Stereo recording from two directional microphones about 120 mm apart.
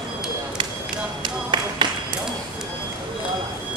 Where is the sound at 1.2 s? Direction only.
40° right (ahead or behind).